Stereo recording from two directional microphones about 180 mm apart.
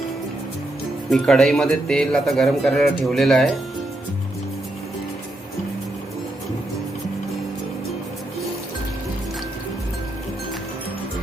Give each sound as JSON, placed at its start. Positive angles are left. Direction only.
{"t": 1.1, "sound": "a man's voice", "side_deg": 0}